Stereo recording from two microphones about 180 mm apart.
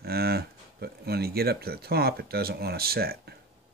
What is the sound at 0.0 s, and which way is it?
Speech, 60° right (ahead or behind).